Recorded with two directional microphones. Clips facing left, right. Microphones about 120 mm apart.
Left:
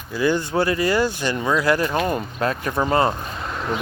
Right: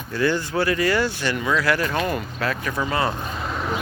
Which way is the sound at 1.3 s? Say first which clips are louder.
Left 1 dB; 30° left (ahead or behind).